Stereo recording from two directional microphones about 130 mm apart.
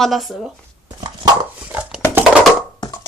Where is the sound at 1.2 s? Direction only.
30° right (ahead or behind).